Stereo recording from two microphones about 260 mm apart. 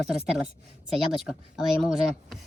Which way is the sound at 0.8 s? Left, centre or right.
Centre.